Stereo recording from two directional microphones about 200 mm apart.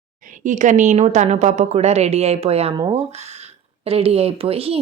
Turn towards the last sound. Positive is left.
turn(degrees=-30)  # may be behind; listen again after turning